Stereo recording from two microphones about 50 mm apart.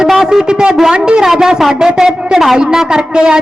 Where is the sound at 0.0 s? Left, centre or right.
Centre.